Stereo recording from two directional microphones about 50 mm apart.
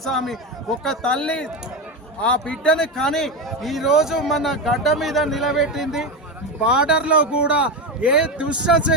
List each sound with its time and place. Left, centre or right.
0.0 s a man's voice: centre
0.9 s a man's voice: centre
6.6 s speech: centre